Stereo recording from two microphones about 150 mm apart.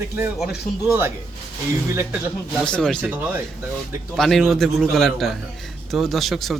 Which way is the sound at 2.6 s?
5° left (ahead or behind).